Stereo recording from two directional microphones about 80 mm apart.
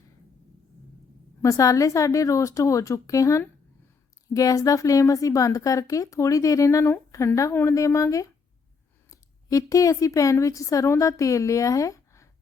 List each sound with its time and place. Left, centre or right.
1.4 s a woman's voice: left